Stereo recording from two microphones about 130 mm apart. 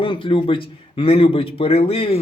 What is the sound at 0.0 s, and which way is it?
A man's voice, 40° left (ahead or behind).